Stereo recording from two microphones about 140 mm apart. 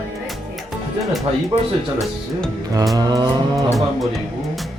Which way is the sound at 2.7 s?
25° right (ahead or behind).